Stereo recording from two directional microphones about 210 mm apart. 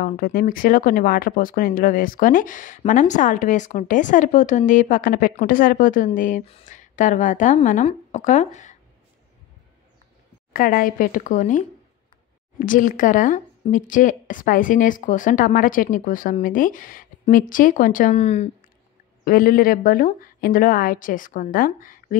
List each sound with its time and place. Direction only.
0.0 s speech: 45° left (ahead or behind)
10.5 s speech: 40° left (ahead or behind)
19.2 s speech: 45° left (ahead or behind)